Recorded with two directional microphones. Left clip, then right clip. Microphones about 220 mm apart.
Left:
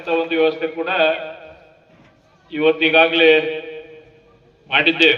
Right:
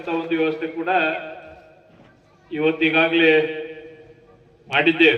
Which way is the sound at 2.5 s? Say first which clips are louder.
Left 4 dB; 55° left (ahead or behind).